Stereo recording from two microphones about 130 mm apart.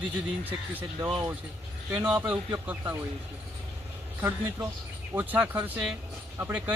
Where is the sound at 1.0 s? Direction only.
40° right (ahead or behind).